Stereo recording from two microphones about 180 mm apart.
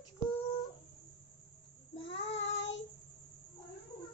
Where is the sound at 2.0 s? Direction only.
80° left.